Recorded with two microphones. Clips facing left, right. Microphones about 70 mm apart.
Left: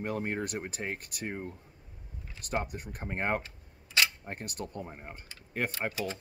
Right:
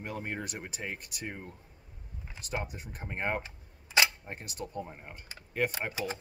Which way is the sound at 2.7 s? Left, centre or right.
Left.